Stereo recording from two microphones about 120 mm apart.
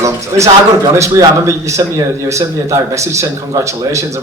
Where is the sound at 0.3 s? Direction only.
30° right (ahead or behind).